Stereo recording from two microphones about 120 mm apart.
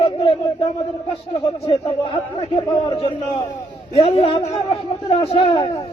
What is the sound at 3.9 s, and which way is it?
A man's voice, 55° left (ahead or behind).